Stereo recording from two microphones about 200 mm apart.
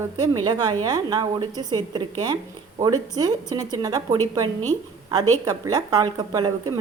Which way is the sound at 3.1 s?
20° right (ahead or behind).